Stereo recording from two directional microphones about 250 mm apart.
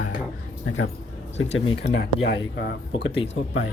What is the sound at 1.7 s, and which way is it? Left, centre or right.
Speech, left.